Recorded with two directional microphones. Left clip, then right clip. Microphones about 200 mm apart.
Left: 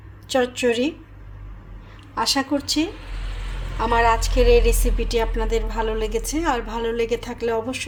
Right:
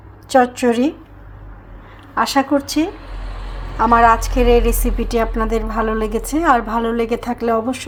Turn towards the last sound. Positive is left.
turn(degrees=-10)  # may be behind; listen again after turning